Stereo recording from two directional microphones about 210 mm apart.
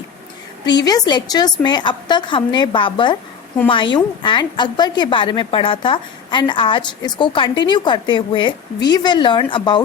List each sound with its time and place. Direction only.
0.6 s a woman's voice: 20° left (ahead or behind)